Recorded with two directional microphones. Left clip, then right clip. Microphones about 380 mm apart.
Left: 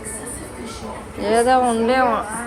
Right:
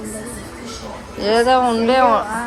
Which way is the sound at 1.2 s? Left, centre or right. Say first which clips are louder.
Right 2 dB; centre.